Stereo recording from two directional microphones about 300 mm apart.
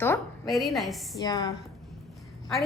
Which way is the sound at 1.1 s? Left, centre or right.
Centre.